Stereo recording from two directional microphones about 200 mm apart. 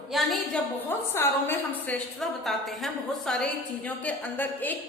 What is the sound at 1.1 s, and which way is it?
A woman's voice, 10° left (ahead or behind).